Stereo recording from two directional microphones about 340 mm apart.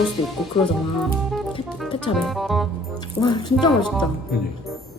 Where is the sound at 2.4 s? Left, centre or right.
Centre.